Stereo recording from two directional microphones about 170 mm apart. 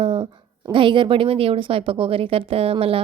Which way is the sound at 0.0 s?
35° right (ahead or behind).